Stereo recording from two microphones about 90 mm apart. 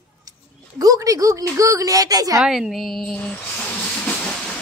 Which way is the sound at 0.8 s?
40° right (ahead or behind).